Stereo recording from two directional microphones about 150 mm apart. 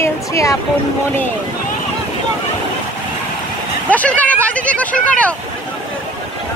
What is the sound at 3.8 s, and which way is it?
Vehicle, 10° left (ahead or behind).